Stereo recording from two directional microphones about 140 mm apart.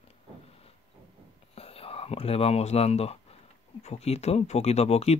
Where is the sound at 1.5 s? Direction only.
45° left (ahead or behind).